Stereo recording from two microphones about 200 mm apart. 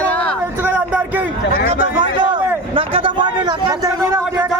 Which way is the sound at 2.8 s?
25° right (ahead or behind).